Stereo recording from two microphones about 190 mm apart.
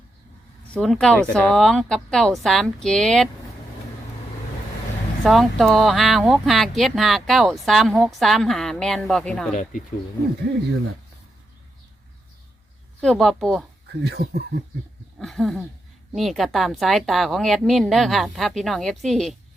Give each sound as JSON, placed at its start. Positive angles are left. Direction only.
{"t": 0.7, "sound": "speech", "side_deg": 5}
{"t": 5.2, "sound": "speech", "side_deg": 0}
{"t": 13.0, "sound": "speech", "side_deg": 0}
{"t": 14.0, "sound": "speech", "side_deg": -60}
{"t": 15.2, "sound": "speech", "side_deg": 0}